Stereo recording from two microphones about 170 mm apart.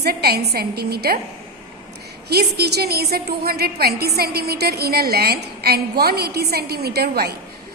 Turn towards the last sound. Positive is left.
turn(degrees=-70)  # may be behind; listen again after turning